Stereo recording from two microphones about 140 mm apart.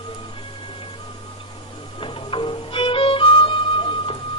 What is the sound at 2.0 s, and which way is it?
Music, 35° left (ahead or behind).